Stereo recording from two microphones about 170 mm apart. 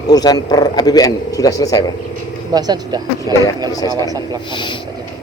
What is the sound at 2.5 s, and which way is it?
Speech, 25° right (ahead or behind).